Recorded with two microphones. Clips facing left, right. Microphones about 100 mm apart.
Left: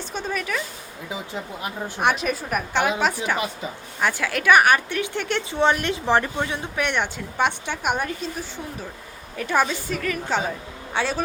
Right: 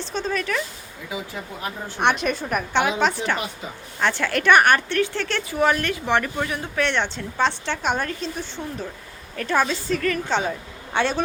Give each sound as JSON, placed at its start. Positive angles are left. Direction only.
{"t": 0.1, "sound": "speech", "side_deg": 10}
{"t": 2.0, "sound": "a woman's voice", "side_deg": 0}
{"t": 6.1, "sound": "a woman's voice", "side_deg": 30}
{"t": 6.4, "sound": "a woman's voice", "side_deg": 20}